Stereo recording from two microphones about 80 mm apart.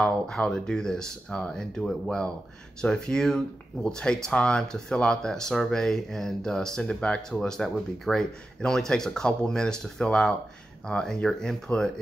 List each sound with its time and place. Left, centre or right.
0.0 s speech: centre